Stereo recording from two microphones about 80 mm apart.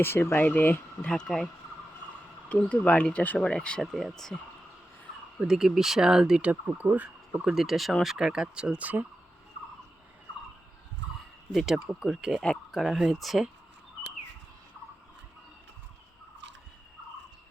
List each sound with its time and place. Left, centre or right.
0.0 s speech: left
1.0 s speech: centre
2.5 s speech: centre
5.4 s speech: centre
6.5 s speech: centre
7.4 s speech: centre
11.5 s speech: centre